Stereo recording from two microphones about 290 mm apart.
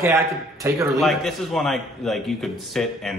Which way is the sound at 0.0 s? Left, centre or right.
Centre.